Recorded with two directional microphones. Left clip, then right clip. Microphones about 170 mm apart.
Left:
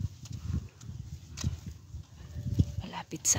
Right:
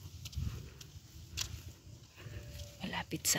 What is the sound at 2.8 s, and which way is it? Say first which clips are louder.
Whispering: left 3 dB; 10° left (ahead or behind).